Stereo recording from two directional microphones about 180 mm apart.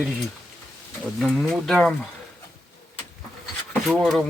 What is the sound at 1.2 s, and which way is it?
Speech, centre (ahead or behind).